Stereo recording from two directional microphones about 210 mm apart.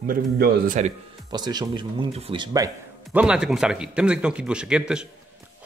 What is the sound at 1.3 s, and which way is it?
Speech, 20° right (ahead or behind).